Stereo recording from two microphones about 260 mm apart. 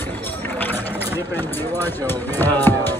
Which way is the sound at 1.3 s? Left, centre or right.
Centre.